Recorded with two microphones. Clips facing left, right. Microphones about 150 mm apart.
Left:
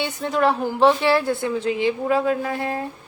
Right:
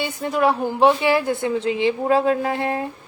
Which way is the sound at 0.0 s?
5° right (ahead or behind).